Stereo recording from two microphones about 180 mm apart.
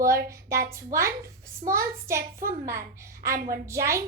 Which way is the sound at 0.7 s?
15° right (ahead or behind).